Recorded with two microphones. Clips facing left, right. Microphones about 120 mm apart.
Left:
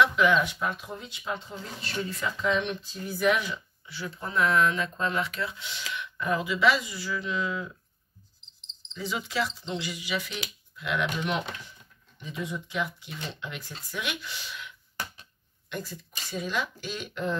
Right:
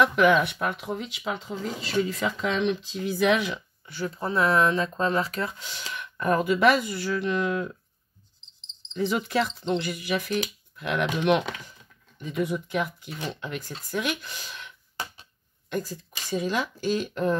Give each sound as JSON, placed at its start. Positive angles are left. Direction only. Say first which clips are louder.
{"t": 0.0, "sound": "speech", "louder": "right 3 dB", "side_deg": -55}
{"t": 3.8, "sound": "speech", "louder": "right 8 dB", "side_deg": -45}
{"t": 8.9, "sound": "speech", "louder": "right 6 dB", "side_deg": -60}
{"t": 15.7, "sound": "speech", "louder": "right 6 dB", "side_deg": -45}